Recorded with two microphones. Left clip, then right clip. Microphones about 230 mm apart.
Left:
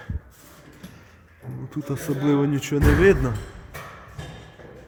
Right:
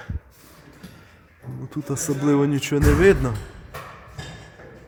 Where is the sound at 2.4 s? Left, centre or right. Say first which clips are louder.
Right 2 dB; right.